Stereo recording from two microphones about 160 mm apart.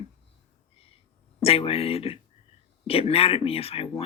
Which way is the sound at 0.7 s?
35° left (ahead or behind).